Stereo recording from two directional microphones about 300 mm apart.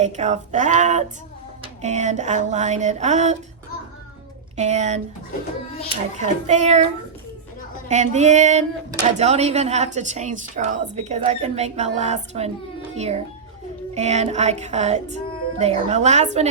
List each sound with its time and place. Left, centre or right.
0.0 s speech: right
4.5 s speech: right
7.9 s speech: right